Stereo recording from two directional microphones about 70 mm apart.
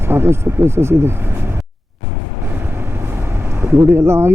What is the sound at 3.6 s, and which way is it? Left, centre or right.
Speech, right.